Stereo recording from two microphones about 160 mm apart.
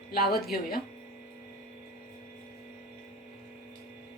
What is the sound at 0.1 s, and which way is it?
Speech, 70° left (ahead or behind).